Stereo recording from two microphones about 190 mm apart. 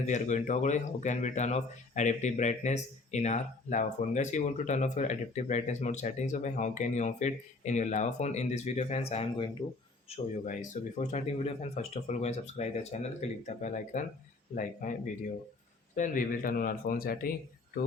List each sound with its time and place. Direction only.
0.1 s speech: 40° left (ahead or behind)
16.0 s speech: 45° left (ahead or behind)